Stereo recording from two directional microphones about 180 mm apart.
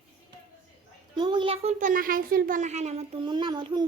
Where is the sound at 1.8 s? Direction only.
50° right (ahead or behind).